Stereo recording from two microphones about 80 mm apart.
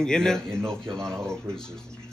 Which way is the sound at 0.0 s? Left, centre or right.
Centre.